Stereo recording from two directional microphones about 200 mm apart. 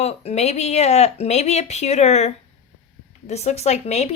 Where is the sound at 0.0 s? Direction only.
30° left (ahead or behind).